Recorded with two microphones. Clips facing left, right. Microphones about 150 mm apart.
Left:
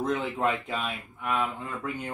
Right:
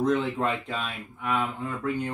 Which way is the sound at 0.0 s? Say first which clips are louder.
Right 2 dB; centre (ahead or behind).